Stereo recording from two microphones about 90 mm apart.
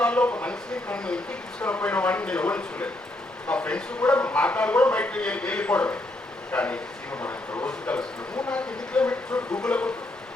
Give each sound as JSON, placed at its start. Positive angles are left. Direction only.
{"t": 0.0, "sound": "speech", "side_deg": 15}